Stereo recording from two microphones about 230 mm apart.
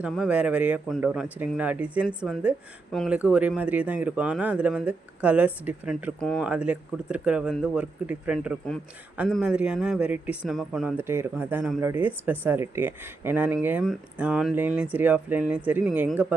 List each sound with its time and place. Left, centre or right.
0.0 s speech: centre